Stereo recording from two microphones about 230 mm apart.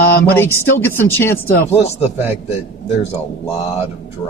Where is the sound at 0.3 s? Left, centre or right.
Centre.